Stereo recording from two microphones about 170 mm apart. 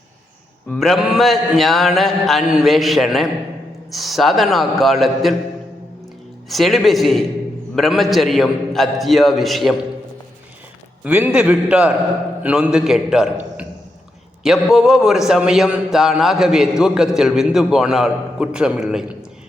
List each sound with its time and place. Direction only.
0.7 s a man's voice: centre (ahead or behind)
6.5 s a man's voice: centre (ahead or behind)
11.0 s a man's voice: 10° right (ahead or behind)